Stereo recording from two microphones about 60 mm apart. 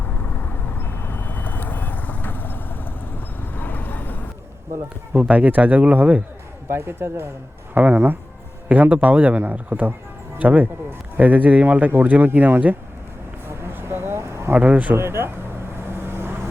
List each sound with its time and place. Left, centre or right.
0.0 s vehicle: left
5.1 s a man's voice: right
6.7 s speech: right
7.7 s a man's voice: right
13.5 s a sound: right
14.5 s a man's voice: right
14.9 s speech: right
16.0 s vehicle: right